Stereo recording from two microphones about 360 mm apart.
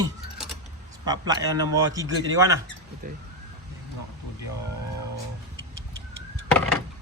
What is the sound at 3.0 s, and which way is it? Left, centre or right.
Speech, right.